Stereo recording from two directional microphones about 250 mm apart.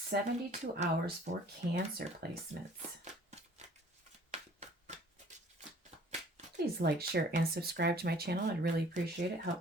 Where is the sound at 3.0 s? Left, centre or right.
Right.